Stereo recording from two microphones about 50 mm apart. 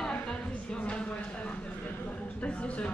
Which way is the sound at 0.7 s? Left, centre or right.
Left.